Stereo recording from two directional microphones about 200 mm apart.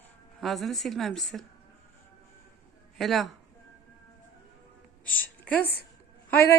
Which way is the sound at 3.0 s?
Centre (ahead or behind).